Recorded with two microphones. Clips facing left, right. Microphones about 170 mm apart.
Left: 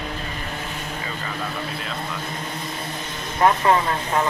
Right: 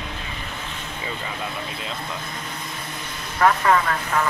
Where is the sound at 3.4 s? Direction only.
25° left (ahead or behind).